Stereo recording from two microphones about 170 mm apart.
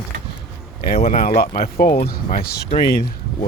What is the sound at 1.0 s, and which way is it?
Speech, 60° left (ahead or behind).